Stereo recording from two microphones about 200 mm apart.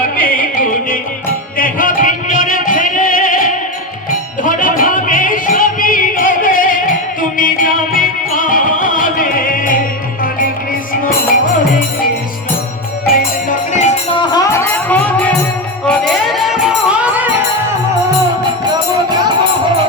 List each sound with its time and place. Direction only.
0.0 s music: 45° left (ahead or behind)
13.1 s music: 40° left (ahead or behind); by 17.2 s 5° right (ahead or behind)